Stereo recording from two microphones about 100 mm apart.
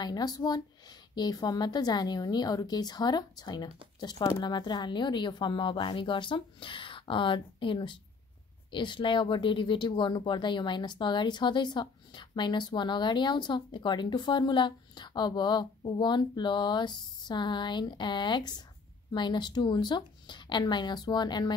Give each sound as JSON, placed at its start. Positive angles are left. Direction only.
{"t": 0.0, "sound": "speech", "side_deg": 40}